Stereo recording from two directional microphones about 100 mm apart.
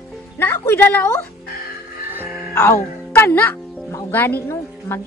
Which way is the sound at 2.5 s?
25° left (ahead or behind).